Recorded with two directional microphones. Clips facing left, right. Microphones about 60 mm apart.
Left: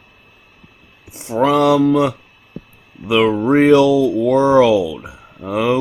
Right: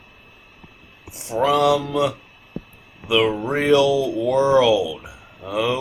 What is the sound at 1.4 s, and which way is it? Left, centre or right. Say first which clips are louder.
Speech: left 4 dB; left.